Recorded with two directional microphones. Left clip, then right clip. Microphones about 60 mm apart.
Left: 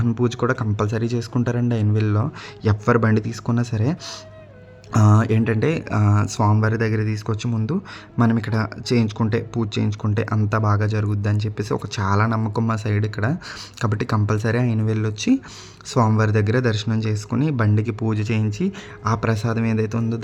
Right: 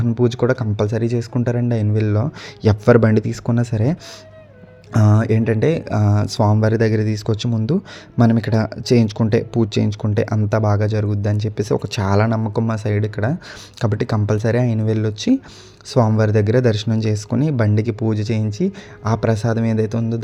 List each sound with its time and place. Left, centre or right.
0.0 s speech: right
2.6 s speech: right
3.2 s speech: right
4.9 s speech: centre; by 6.5 s right
6.6 s speech: right
8.2 s speech: right
9.3 s speech: right
10.0 s speech: right
10.3 s speech: right
11.4 s speech: right
12.5 s speech: centre
16.6 s speech: right
17.3 s speech: right